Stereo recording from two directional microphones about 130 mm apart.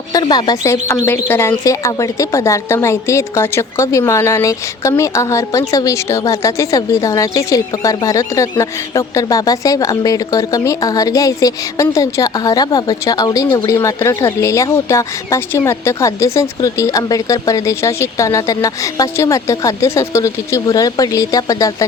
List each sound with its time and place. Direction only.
0.1 s speech: 30° left (ahead or behind)